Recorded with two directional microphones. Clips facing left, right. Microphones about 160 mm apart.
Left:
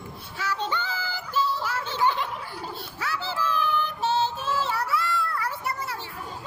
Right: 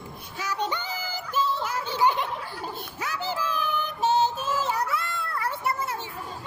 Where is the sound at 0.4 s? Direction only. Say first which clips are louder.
Even; 15° right (ahead or behind).